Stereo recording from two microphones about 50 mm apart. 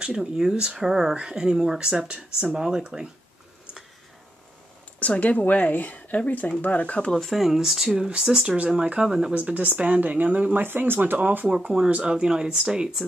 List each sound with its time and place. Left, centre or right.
0.0 s speech: centre
5.0 s speech: left
7.2 s speech: centre
7.9 s speech: centre
9.3 s speech: right
11.4 s speech: centre